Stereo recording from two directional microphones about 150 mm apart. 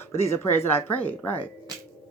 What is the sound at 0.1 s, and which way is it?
Speech, 15° left (ahead or behind).